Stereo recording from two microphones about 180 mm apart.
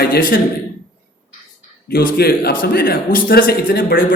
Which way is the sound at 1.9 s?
55° left (ahead or behind).